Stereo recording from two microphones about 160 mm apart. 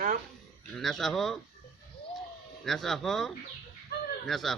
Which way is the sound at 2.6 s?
Centre (ahead or behind).